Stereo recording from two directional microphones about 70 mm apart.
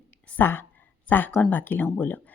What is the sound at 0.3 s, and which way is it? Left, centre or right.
Speech, left.